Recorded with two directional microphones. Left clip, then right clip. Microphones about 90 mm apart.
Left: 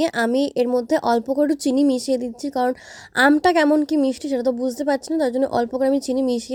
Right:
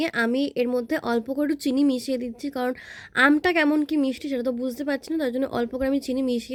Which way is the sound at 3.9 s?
40° left (ahead or behind).